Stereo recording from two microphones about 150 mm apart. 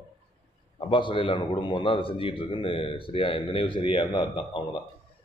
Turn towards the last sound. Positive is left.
turn(degrees=35)  # may be behind; listen again after turning